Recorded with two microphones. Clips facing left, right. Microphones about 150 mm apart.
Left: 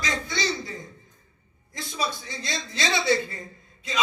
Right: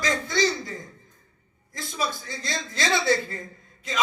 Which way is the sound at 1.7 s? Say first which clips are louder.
Even; 45° right (ahead or behind).